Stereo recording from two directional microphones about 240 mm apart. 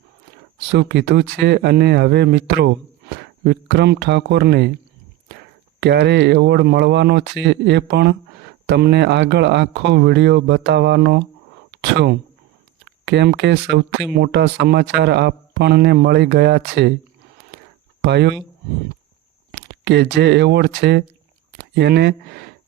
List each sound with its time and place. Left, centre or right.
0.7 s speech: right
5.8 s speech: right
18.0 s speech: right
19.5 s speech: right